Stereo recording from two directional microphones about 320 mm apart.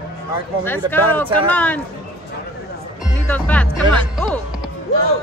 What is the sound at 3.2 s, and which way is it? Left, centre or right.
Speech, centre.